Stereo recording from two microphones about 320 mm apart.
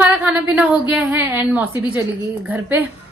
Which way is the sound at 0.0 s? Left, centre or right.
Centre.